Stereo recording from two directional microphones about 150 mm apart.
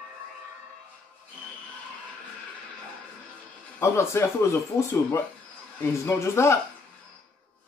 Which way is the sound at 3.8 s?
20° left (ahead or behind).